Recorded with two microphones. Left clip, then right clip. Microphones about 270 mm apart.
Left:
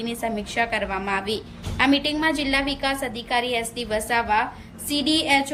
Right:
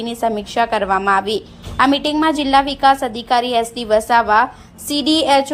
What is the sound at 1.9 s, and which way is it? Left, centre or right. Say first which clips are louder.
A woman's voice: right 5 dB; centre.